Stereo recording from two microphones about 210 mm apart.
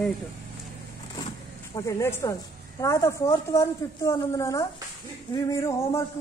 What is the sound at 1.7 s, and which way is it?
A woman's voice, 15° left (ahead or behind).